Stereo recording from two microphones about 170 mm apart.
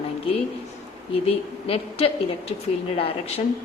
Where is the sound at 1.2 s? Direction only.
35° left (ahead or behind).